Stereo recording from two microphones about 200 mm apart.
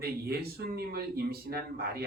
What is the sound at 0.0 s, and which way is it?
Speech, 50° right (ahead or behind).